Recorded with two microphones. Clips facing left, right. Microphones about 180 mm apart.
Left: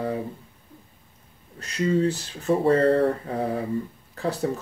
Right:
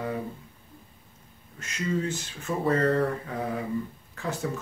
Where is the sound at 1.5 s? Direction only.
35° left (ahead or behind).